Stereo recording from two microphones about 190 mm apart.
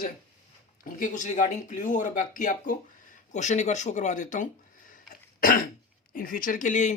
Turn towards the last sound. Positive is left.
turn(degrees=40)  # may be behind; listen again after turning